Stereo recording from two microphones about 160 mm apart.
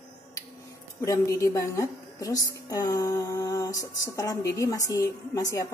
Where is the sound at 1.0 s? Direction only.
20° left (ahead or behind).